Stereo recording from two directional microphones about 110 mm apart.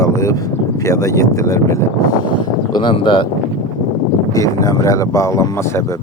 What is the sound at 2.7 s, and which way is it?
Speech, 45° left (ahead or behind).